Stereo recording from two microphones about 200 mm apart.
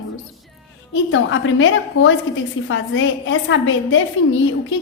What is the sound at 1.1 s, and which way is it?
A woman's voice, 75° left (ahead or behind).